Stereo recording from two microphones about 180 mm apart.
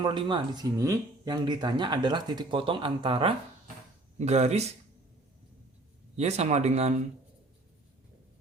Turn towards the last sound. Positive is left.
turn(degrees=-40)  # may be behind; listen again after turning